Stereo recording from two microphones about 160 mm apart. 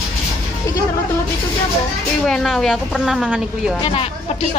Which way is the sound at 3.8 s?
35° left (ahead or behind).